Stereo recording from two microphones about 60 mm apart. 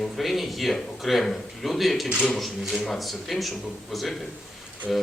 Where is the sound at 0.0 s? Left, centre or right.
Centre.